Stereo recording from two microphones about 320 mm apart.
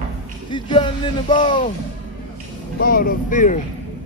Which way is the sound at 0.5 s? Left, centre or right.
Centre.